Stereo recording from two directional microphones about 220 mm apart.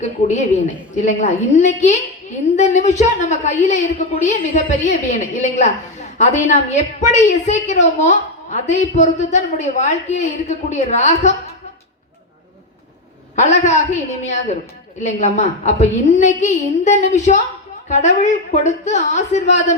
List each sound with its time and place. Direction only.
0.0 s a woman's voice: 35° left (ahead or behind)
13.3 s a woman's voice: 30° left (ahead or behind)